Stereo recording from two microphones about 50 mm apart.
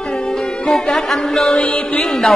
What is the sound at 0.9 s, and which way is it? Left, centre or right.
Music, centre.